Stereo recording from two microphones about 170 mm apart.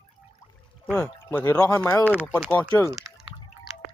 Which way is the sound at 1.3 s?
15° left (ahead or behind).